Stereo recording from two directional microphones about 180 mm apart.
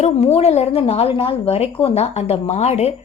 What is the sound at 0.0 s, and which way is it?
A woman's voice, 35° left (ahead or behind).